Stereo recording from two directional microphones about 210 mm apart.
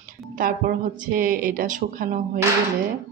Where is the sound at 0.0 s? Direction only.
45° right (ahead or behind).